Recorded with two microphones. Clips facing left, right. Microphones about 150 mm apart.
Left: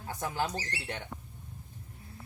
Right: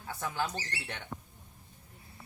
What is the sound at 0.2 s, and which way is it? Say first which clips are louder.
Speech: left 2 dB; 20° left (ahead or behind).